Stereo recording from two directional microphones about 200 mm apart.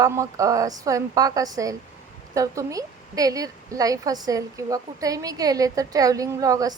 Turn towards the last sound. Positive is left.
turn(degrees=-15)  # may be behind; listen again after turning